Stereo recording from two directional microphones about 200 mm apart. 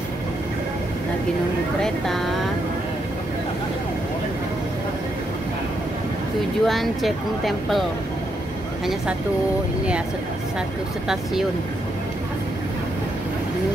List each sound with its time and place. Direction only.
1.8 s speech: centre (ahead or behind)
6.6 s speech: centre (ahead or behind)